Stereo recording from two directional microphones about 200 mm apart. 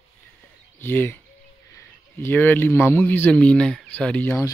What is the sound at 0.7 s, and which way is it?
A man's voice, 10° left (ahead or behind).